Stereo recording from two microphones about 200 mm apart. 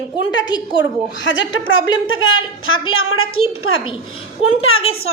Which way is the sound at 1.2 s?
70° left (ahead or behind).